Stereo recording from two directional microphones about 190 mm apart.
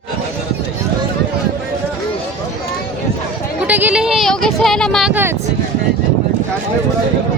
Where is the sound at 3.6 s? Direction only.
10° right (ahead or behind).